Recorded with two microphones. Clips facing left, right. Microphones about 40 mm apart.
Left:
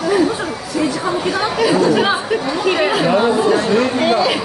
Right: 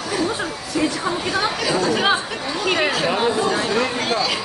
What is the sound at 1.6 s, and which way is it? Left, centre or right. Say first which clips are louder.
A woman's voice: left 6 dB; centre.